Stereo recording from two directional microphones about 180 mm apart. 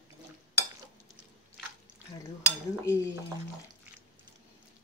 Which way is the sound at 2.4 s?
15° left (ahead or behind).